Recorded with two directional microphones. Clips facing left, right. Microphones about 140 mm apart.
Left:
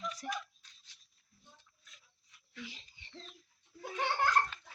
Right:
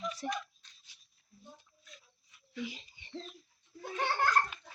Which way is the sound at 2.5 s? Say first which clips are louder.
Right 8 dB; 10° right (ahead or behind).